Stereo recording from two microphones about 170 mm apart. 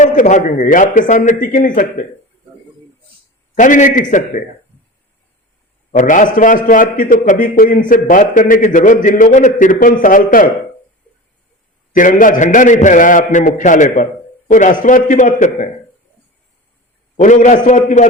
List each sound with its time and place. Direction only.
0.0 s a man's voice: 45° left (ahead or behind)
3.5 s a man's voice: 50° left (ahead or behind)
5.9 s a man's voice: 50° left (ahead or behind)
11.9 s a man's voice: 50° left (ahead or behind)
17.2 s a man's voice: 45° left (ahead or behind)